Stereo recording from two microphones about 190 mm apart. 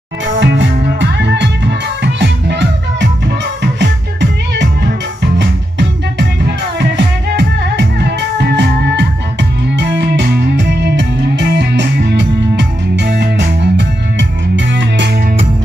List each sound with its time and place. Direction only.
0.4 s music: 70° right (ahead or behind)